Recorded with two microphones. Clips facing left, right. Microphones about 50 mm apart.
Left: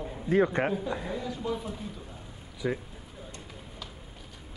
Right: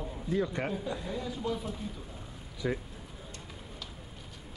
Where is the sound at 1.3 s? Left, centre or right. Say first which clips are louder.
Left 1 dB; centre.